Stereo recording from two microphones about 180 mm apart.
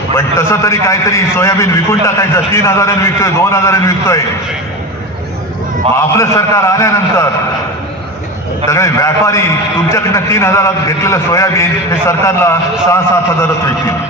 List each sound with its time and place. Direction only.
0.3 s a man's voice: 15° left (ahead or behind)
6.1 s a man's voice: 15° left (ahead or behind)
8.6 s a man's voice: 15° left (ahead or behind)